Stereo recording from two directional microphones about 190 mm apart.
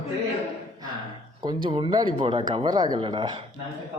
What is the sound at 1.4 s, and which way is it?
Speech, 25° right (ahead or behind).